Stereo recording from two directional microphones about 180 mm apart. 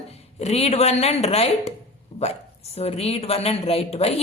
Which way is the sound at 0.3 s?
35° left (ahead or behind).